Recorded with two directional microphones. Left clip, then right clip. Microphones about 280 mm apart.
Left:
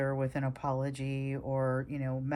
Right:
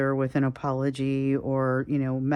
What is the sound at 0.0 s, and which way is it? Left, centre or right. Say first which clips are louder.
Speech: right 8 dB; centre.